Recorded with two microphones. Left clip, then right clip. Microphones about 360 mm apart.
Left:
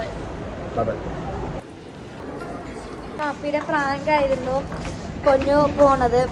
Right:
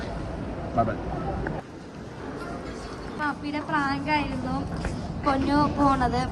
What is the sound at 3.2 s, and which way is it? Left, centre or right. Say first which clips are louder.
A woman's voice: left 6 dB; centre.